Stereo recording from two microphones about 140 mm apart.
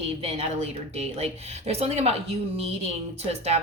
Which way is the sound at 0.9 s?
50° right (ahead or behind).